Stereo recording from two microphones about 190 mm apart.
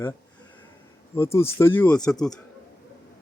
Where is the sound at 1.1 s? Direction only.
15° left (ahead or behind).